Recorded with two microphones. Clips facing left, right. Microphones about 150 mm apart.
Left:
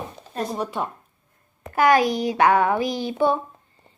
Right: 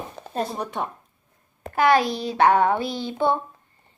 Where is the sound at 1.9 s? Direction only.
15° left (ahead or behind).